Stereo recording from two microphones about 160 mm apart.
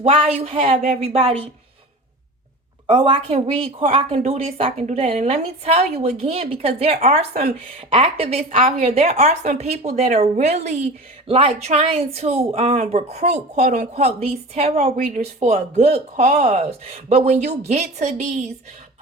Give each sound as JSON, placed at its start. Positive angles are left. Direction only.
{"t": 0.0, "sound": "a woman's voice", "side_deg": -40}
{"t": 2.8, "sound": "a woman's voice", "side_deg": -30}